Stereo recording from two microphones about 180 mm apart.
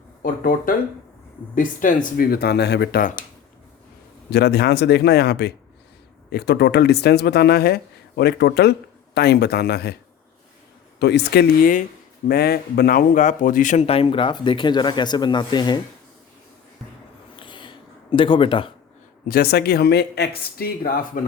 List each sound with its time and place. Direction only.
0.2 s speech: 50° left (ahead or behind); by 3.0 s 70° left (ahead or behind)
4.3 s speech: 65° left (ahead or behind)
11.0 s speech: 70° left (ahead or behind); by 11.9 s 50° left (ahead or behind)
12.3 s speech: 65° left (ahead or behind); by 15.8 s 25° left (ahead or behind)
17.3 s a sound: 25° left (ahead or behind)
19.3 s speech: 60° left (ahead or behind)